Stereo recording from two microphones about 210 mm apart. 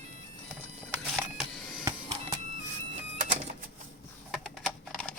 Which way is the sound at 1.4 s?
Centre (ahead or behind).